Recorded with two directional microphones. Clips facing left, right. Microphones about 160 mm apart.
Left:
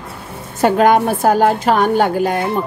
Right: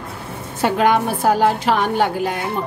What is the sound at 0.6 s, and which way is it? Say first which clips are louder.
A woman's voice: left 4 dB; 45° left (ahead or behind).